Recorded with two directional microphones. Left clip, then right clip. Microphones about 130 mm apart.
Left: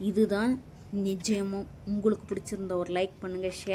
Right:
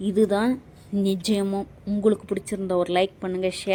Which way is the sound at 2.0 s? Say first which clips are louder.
Right 7 dB; 25° right (ahead or behind).